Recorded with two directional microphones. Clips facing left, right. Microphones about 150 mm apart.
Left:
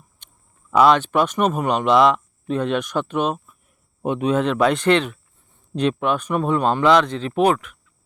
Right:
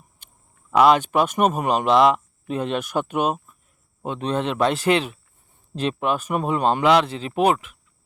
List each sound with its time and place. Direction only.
0.2 s a sound: 5° right (ahead or behind)
0.8 s speech: 10° right (ahead or behind)
4.0 s a man's voice: 20° left (ahead or behind)
4.3 s speech: centre (ahead or behind)